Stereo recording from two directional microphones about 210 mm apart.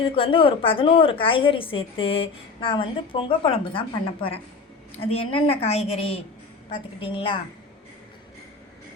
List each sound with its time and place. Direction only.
0.2 s a woman's voice: 25° left (ahead or behind)